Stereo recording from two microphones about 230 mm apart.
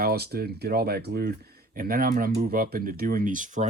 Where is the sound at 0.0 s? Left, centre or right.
Right.